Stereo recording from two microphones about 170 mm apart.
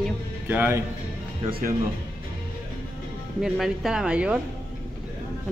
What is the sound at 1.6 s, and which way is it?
Speech, 50° right (ahead or behind).